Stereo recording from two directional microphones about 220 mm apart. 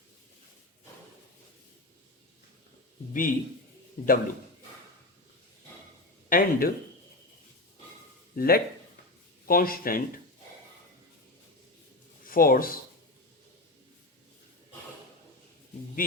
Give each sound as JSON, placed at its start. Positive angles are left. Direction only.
{"t": 3.1, "sound": "speech", "side_deg": 40}
{"t": 6.2, "sound": "speech", "side_deg": 40}
{"t": 8.4, "sound": "speech", "side_deg": 40}
{"t": 12.2, "sound": "speech", "side_deg": 40}
{"t": 16.0, "sound": "music", "side_deg": 40}